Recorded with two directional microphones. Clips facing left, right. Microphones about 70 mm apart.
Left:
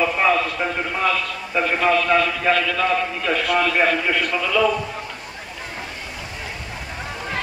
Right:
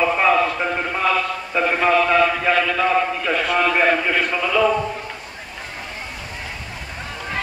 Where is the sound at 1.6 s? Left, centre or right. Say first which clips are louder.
Right 1 dB; centre.